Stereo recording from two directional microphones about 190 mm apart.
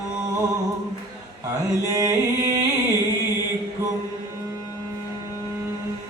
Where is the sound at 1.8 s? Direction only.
15° right (ahead or behind).